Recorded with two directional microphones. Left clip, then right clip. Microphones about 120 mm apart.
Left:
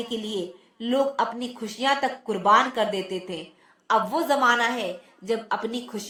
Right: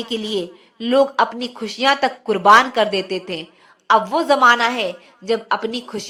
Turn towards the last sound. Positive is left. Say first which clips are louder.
# right 6 dB
turn(degrees=-15)  # may be behind; listen again after turning